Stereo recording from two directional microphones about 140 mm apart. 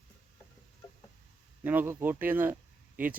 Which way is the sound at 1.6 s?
15° right (ahead or behind).